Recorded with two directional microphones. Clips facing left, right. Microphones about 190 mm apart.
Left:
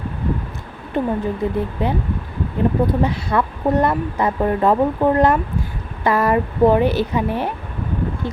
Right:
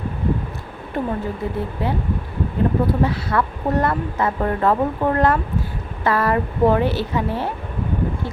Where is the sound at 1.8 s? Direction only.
15° left (ahead or behind).